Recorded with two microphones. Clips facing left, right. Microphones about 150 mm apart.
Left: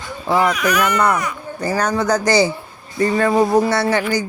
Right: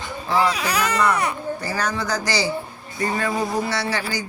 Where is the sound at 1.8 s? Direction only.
45° left (ahead or behind).